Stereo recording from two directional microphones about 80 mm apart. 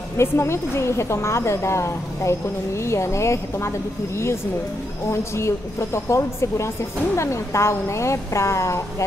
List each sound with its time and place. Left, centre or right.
0.2 s a woman's voice: left